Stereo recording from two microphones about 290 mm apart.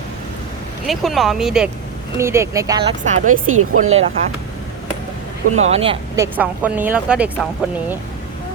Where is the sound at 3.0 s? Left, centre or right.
Right.